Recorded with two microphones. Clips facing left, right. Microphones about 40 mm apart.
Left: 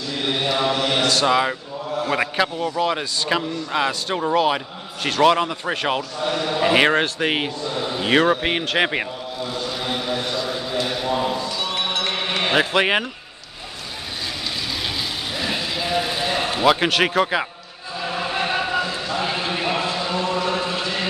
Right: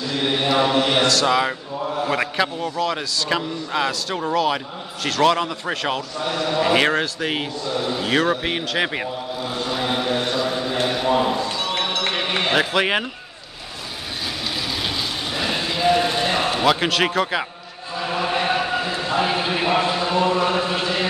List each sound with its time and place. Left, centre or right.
0.1 s mantra: centre
1.2 s speech: centre
2.8 s a man's voice: centre
6.2 s a man's voice: centre
7.0 s speech: left
7.6 s a man's voice: centre
9.7 s vehicle: centre
10.9 s a sound: centre
12.4 s a man's voice: centre
15.3 s vehicle: centre
16.0 s a sound: centre
16.6 s speech: centre
18.4 s a sound: centre
18.8 s a sound: centre